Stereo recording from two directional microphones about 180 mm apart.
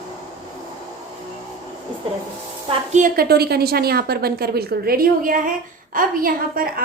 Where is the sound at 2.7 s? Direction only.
45° right (ahead or behind).